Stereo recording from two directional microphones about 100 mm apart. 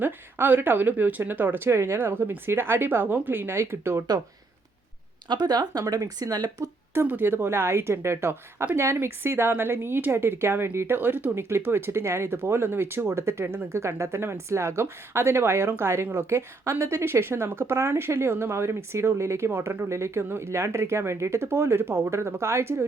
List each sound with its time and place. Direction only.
0.0 s a woman's voice: 20° right (ahead or behind)
5.3 s speech: 45° right (ahead or behind)
6.9 s a woman's voice: 20° right (ahead or behind)